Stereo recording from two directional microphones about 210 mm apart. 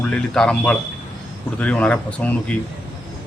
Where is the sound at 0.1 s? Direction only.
5° left (ahead or behind).